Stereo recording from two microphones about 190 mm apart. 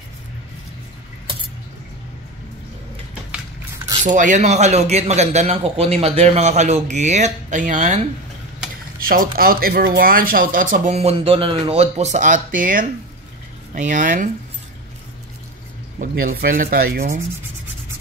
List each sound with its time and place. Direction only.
4.0 s speech: 40° right (ahead or behind)
9.0 s speech: 50° right (ahead or behind)
16.0 s speech: 50° right (ahead or behind)